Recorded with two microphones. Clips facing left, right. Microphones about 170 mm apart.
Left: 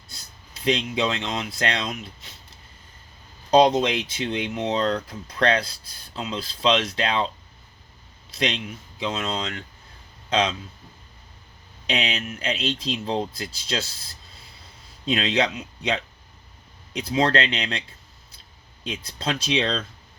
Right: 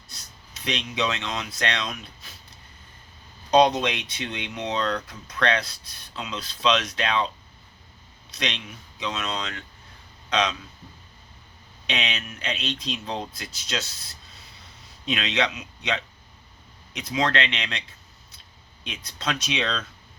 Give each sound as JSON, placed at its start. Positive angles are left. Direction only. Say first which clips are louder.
{"t": 0.1, "sound": "speech", "louder": "left 1 dB", "side_deg": 30}
{"t": 3.5, "sound": "speech", "louder": "left 2 dB", "side_deg": 30}
{"t": 8.4, "sound": "speech", "louder": "left 5 dB", "side_deg": 30}
{"t": 11.9, "sound": "speech", "louder": "left 4 dB", "side_deg": 35}
{"t": 15.0, "sound": "speech", "louder": "left 3 dB", "side_deg": 35}
{"t": 18.9, "sound": "speech", "louder": "left 3 dB", "side_deg": 30}